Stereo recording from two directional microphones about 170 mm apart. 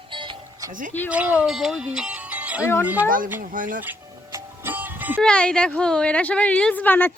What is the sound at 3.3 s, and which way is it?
Speech, 50° right (ahead or behind).